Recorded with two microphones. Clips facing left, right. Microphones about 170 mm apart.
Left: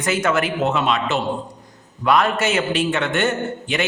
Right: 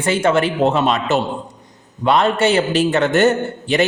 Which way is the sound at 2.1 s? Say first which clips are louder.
Right 3 dB; 25° right (ahead or behind).